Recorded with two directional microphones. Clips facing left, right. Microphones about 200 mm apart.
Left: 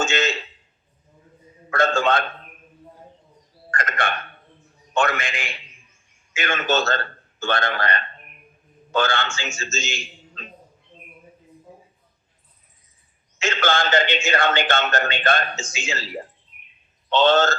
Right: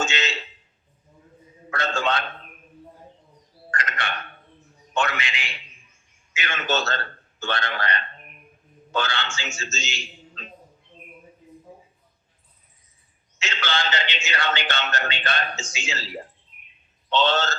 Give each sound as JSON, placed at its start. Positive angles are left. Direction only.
{"t": 0.0, "sound": "a sound", "side_deg": 50}
{"t": 1.7, "sound": "a man's voice", "side_deg": 50}
{"t": 3.7, "sound": "a sound", "side_deg": 50}
{"t": 4.9, "sound": "a man's voice", "side_deg": 50}
{"t": 13.4, "sound": "a man's voice", "side_deg": 50}
{"t": 17.1, "sound": "a man's voice", "side_deg": 50}